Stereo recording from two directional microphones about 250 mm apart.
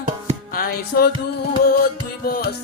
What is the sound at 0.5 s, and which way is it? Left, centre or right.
Music, left.